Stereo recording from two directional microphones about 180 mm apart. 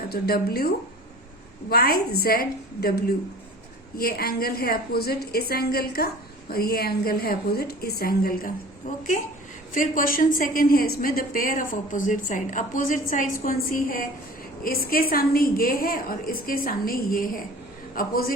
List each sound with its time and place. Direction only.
0.1 s a woman's voice: 60° left (ahead or behind)
1.7 s a woman's voice: 60° left (ahead or behind)
3.9 s a woman's voice: 55° left (ahead or behind)